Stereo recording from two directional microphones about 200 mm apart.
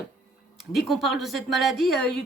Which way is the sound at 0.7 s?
Centre (ahead or behind).